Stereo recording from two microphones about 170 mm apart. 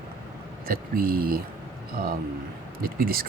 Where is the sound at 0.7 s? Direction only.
60° right (ahead or behind).